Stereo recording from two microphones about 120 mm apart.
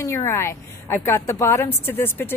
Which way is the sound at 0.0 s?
25° left (ahead or behind).